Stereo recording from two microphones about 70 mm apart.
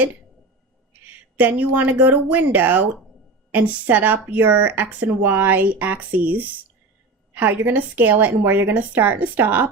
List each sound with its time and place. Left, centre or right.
1.0 s speech: right